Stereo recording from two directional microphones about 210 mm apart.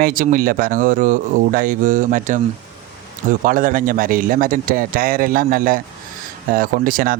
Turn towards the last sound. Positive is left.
turn(degrees=-45)  # may be behind; listen again after turning